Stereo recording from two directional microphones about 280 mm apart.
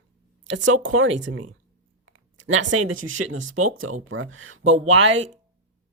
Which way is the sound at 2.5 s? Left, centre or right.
Right.